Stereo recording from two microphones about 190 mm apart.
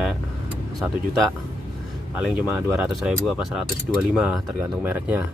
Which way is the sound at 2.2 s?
5° right (ahead or behind).